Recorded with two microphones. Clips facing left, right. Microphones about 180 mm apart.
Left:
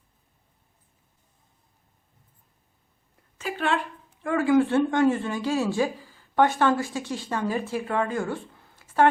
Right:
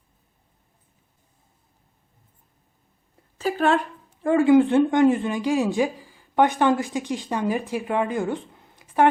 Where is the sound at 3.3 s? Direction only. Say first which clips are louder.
Right 6 dB; 40° right (ahead or behind).